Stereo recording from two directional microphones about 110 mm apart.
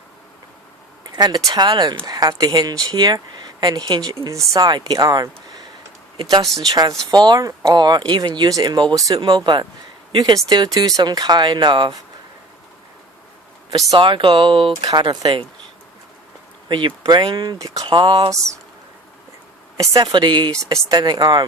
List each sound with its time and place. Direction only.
1.1 s speech: 40° right (ahead or behind)
6.7 s speech: 35° right (ahead or behind)
13.7 s speech: 35° right (ahead or behind)
14.0 s speech: 50° right (ahead or behind)
16.6 s speech: 45° right (ahead or behind)
19.8 s speech: 35° right (ahead or behind)